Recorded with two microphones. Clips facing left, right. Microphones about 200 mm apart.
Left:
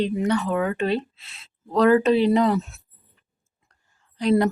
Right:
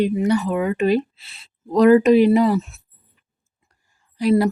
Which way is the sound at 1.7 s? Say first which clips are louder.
Right 5 dB; 15° right (ahead or behind).